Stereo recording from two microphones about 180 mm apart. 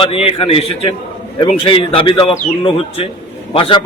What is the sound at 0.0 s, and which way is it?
A man's voice, 30° left (ahead or behind).